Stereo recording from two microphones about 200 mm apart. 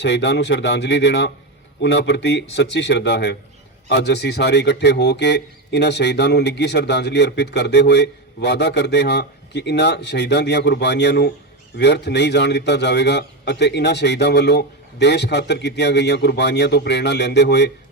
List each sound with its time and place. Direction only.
0.0 s speech: 60° left (ahead or behind)